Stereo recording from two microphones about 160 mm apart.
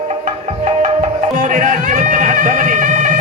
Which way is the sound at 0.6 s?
50° right (ahead or behind).